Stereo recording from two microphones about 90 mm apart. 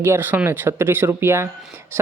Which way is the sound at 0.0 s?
25° right (ahead or behind).